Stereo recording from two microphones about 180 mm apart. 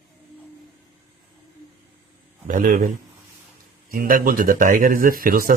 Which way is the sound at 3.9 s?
50° right (ahead or behind).